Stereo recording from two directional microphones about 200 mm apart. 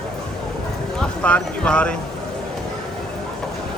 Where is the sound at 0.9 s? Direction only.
5° left (ahead or behind).